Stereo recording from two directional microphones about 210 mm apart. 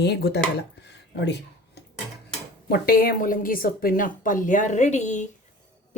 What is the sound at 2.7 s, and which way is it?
Speech, 45° left (ahead or behind).